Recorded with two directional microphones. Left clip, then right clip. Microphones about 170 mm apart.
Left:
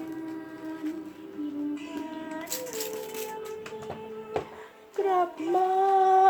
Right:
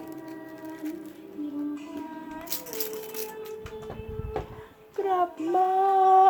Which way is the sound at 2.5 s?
20° right (ahead or behind).